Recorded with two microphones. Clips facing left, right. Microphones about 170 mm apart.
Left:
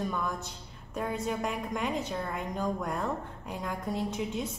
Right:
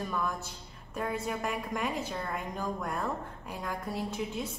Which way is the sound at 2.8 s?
20° left (ahead or behind).